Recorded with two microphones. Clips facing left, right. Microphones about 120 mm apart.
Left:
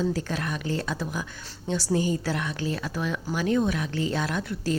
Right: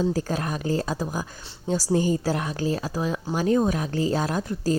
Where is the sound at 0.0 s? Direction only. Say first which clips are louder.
Right 3 dB; 40° right (ahead or behind).